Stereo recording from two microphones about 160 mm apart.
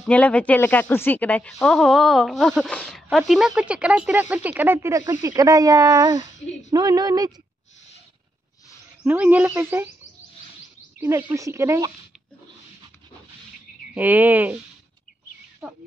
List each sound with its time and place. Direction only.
0.0 s speech: 10° left (ahead or behind); by 7.3 s 25° right (ahead or behind)
9.0 s speech: 10° right (ahead or behind)
11.0 s speech: 15° right (ahead or behind)
13.9 s speech: 10° right (ahead or behind)
15.6 s speech: 10° right (ahead or behind)